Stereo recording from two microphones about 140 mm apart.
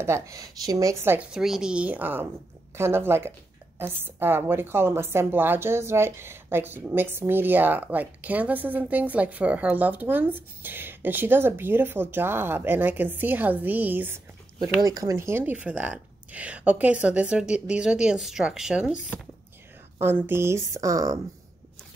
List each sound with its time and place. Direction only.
0.0 s a woman's voice: 20° right (ahead or behind)
1.1 s a woman's voice: 5° right (ahead or behind)
14.8 s a woman's voice: 25° right (ahead or behind); by 19.1 s 5° right (ahead or behind)
20.0 s a woman's voice: 15° right (ahead or behind)